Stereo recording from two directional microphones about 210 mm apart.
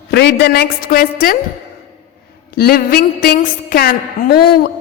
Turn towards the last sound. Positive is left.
turn(degrees=45)  # may be behind; listen again after turning